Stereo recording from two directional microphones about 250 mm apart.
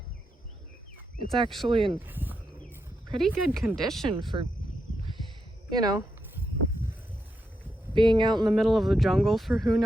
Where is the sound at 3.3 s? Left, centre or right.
Centre.